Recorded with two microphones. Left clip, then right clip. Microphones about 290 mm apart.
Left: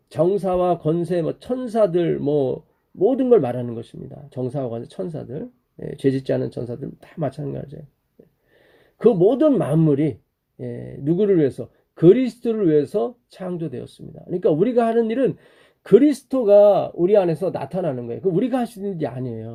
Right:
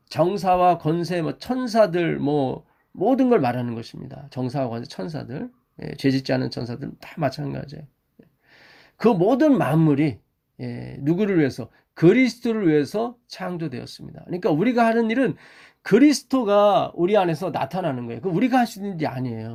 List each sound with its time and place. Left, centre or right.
0.1 s speech: right
9.2 s speech: right